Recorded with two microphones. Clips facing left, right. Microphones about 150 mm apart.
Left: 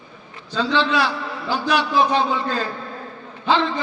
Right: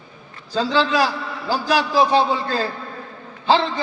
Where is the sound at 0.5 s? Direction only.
40° right (ahead or behind).